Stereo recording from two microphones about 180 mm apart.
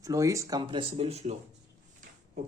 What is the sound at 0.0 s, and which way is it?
Speech, 20° right (ahead or behind).